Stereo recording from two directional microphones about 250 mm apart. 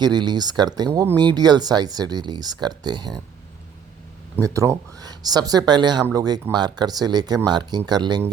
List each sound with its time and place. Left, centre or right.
0.0 s speech: centre
4.4 s speech: centre